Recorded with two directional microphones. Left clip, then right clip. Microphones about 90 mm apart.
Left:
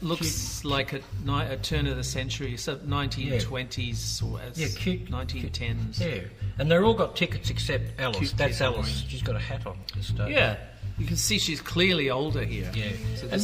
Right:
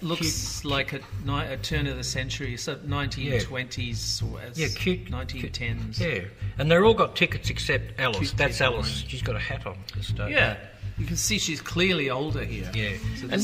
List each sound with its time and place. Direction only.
0.0 s speech: 25° left (ahead or behind)
6.6 s speech: 35° right (ahead or behind)
10.3 s speech: 30° left (ahead or behind)
12.7 s speech: 25° right (ahead or behind)